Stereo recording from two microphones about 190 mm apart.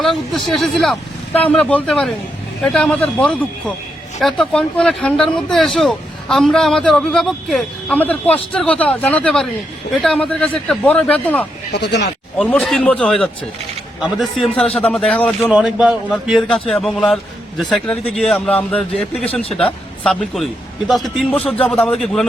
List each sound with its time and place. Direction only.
0.0 s a man's voice: centre (ahead or behind)
11.7 s speech: 65° left (ahead or behind)
12.4 s speech: 5° left (ahead or behind)
15.5 s speech: 5° right (ahead or behind)